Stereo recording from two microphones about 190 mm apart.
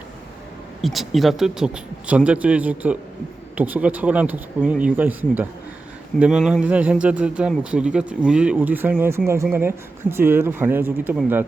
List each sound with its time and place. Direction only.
0.8 s speech: centre (ahead or behind)